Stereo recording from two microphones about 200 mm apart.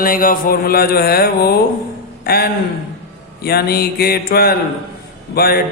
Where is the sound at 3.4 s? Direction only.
50° left (ahead or behind).